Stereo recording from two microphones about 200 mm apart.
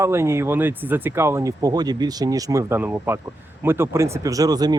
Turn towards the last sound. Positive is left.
turn(degrees=-20)  # may be behind; listen again after turning